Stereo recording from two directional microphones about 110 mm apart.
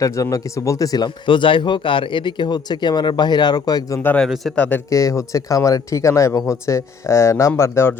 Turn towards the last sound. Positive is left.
turn(degrees=25)  # may be behind; listen again after turning